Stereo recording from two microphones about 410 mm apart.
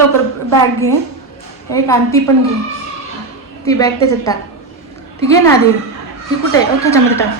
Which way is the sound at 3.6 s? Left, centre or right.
Centre.